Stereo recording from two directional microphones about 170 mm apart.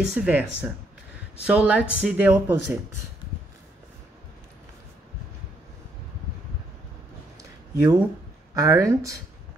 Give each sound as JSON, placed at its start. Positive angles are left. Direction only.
{"t": 0.0, "sound": "speech", "side_deg": -5}
{"t": 7.7, "sound": "speech", "side_deg": -20}